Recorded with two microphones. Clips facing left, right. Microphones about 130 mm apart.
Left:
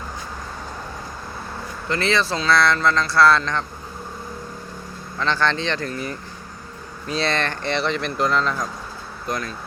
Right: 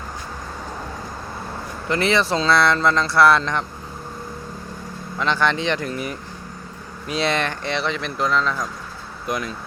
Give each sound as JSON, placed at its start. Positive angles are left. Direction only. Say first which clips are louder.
{"t": 1.9, "sound": "speech", "louder": "right 2 dB", "side_deg": -20}
{"t": 5.2, "sound": "speech", "louder": "right 1 dB", "side_deg": -10}
{"t": 9.2, "sound": "speech", "louder": "right 2 dB", "side_deg": -15}